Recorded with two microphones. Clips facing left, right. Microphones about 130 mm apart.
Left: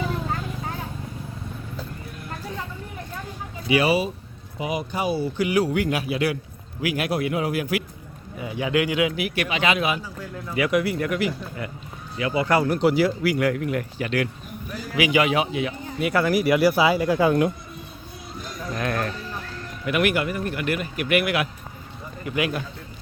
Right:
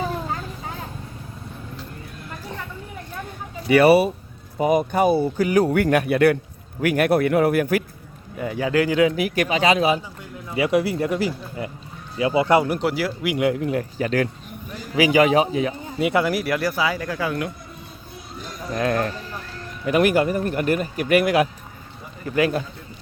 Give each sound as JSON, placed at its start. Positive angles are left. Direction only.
{"t": 3.7, "sound": "speech", "side_deg": -60}
{"t": 4.5, "sound": "a man's voice", "side_deg": -45}
{"t": 12.6, "sound": "speech", "side_deg": -5}
{"t": 13.2, "sound": "a man's voice", "side_deg": -20}
{"t": 16.0, "sound": "speech", "side_deg": -20}
{"t": 16.2, "sound": "speech", "side_deg": 0}
{"t": 18.7, "sound": "a man's voice", "side_deg": -30}